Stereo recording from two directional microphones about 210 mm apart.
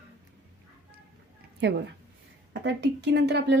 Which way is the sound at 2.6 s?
55° right (ahead or behind).